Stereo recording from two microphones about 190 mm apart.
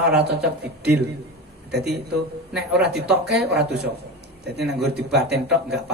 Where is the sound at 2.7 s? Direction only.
60° right (ahead or behind).